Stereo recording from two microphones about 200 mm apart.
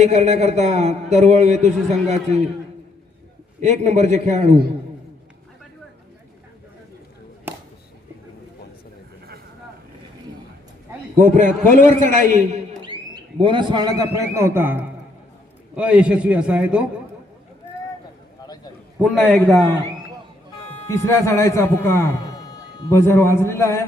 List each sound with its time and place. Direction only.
0.0 s a man's voice: 35° right (ahead or behind)
3.6 s a man's voice: 35° right (ahead or behind)
7.5 s a sound: 10° right (ahead or behind)
11.2 s a man's voice: 40° right (ahead or behind)
12.8 s a man's voice: 25° right (ahead or behind); by 16.8 s 5° right (ahead or behind)
18.4 s a sound: 20° left (ahead or behind)
19.0 s a man's voice: 5° left (ahead or behind)
20.9 s a man's voice: 15° left (ahead or behind)